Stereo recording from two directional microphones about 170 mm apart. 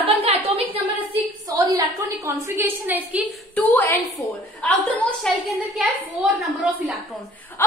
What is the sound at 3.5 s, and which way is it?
A woman's voice, 10° left (ahead or behind).